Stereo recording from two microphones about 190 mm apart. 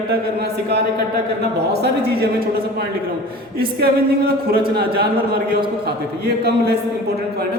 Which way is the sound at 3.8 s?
55° right (ahead or behind).